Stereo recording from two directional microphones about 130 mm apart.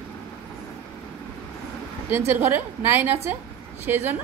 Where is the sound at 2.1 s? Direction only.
15° right (ahead or behind).